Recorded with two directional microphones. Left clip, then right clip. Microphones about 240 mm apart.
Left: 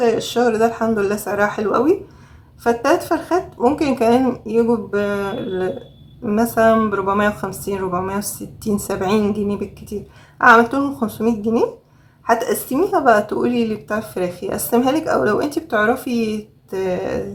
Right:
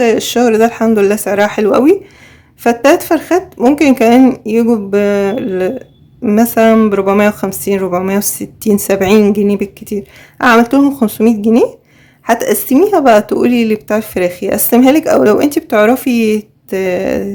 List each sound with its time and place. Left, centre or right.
0.0 s a woman's voice: right